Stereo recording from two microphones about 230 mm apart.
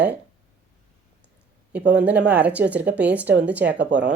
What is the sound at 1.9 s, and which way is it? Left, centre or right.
A woman's voice, centre.